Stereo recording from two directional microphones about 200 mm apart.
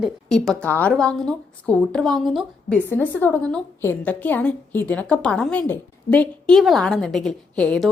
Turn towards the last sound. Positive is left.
turn(degrees=5)  # may be behind; listen again after turning